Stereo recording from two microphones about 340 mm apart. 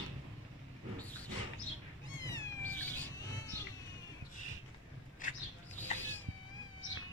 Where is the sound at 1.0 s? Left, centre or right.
Centre.